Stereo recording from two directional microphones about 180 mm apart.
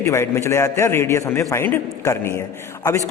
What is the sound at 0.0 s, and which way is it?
A man's voice, 15° left (ahead or behind).